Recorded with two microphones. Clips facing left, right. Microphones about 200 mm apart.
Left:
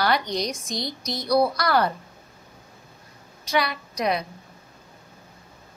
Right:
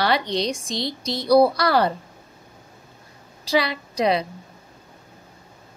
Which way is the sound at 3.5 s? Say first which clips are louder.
Right 3 dB; 30° right (ahead or behind).